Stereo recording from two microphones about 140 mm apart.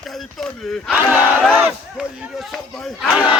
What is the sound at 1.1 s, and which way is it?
Crowd, 10° right (ahead or behind).